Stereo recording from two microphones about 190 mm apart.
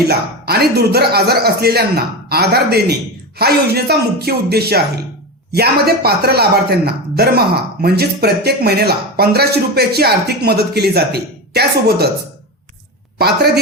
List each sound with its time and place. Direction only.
0.1 s speech: 55° right (ahead or behind)
13.1 s speech: 55° right (ahead or behind)